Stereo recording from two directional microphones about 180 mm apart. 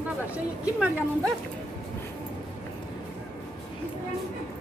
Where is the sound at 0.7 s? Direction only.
5° right (ahead or behind).